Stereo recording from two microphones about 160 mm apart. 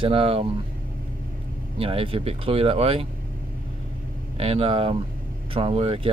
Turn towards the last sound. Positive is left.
turn(degrees=-35)  # may be behind; listen again after turning